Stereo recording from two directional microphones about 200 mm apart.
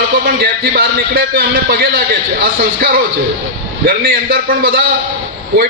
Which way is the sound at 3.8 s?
50° right (ahead or behind).